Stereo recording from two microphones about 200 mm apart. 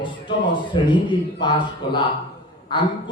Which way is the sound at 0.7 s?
25° left (ahead or behind).